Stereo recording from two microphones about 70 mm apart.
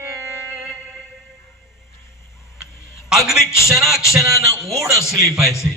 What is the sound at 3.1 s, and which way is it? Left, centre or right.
Speech, centre.